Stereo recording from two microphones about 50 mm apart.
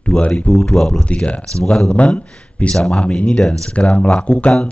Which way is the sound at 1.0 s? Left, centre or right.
Left.